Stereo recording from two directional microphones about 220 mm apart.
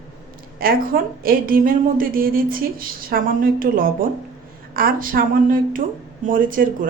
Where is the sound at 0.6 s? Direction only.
40° right (ahead or behind).